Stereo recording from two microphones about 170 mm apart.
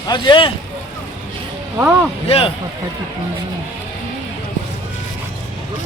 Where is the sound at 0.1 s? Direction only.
30° left (ahead or behind).